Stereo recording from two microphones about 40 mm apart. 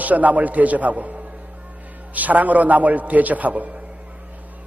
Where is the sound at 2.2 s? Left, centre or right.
Right.